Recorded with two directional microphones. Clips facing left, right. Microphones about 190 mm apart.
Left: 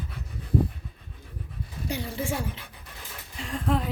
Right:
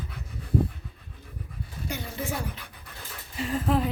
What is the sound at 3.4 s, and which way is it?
Speech, 5° right (ahead or behind).